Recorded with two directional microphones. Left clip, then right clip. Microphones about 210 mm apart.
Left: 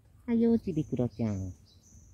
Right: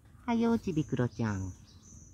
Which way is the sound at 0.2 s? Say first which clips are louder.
Left 2 dB; 25° right (ahead or behind).